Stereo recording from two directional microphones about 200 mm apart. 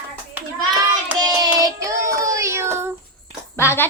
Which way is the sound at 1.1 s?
20° right (ahead or behind).